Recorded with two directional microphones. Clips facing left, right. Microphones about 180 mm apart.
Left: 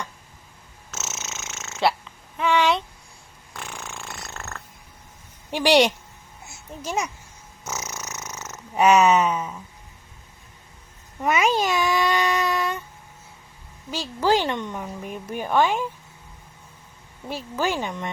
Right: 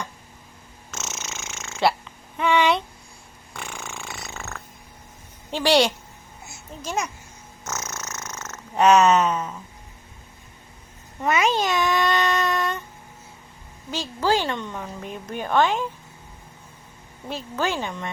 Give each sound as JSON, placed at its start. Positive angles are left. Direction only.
{"t": 0.9, "sound": "snoring", "side_deg": 5}
{"t": 3.5, "sound": "purr", "side_deg": 0}
{"t": 5.5, "sound": "a woman's voice", "side_deg": 15}
{"t": 7.6, "sound": "purr", "side_deg": 15}
{"t": 11.2, "sound": "a sound", "side_deg": 10}
{"t": 13.9, "sound": "a woman's voice", "side_deg": 10}
{"t": 17.2, "sound": "a woman's voice", "side_deg": 10}